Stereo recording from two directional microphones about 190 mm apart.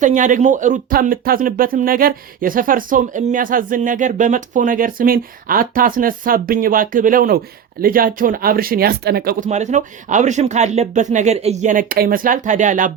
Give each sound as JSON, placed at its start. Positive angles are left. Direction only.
{"t": 0.0, "sound": "speech", "side_deg": -40}
{"t": 9.5, "sound": "speech", "side_deg": -40}